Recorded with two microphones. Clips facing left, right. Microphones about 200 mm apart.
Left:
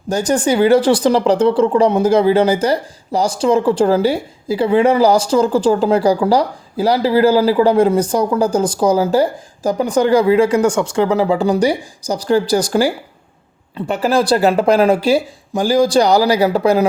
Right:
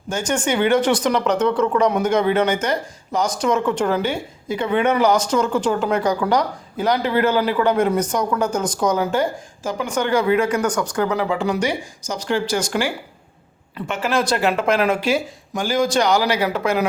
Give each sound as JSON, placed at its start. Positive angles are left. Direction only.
{"t": 0.1, "sound": "speech", "side_deg": 35}